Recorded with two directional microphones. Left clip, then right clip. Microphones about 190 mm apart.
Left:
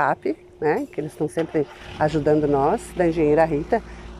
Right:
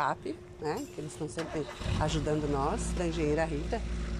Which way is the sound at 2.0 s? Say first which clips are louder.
Left 13 dB; 30° left (ahead or behind).